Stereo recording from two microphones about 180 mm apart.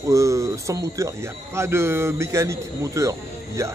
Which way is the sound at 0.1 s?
15° right (ahead or behind).